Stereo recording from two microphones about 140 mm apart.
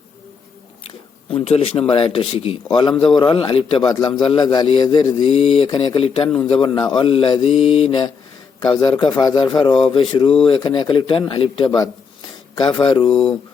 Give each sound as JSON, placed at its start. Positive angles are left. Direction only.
{"t": 0.9, "sound": "a man's voice", "side_deg": 45}
{"t": 5.3, "sound": "a man's voice", "side_deg": 45}
{"t": 12.8, "sound": "a man's voice", "side_deg": 35}
{"t": 13.1, "sound": "speech", "side_deg": 5}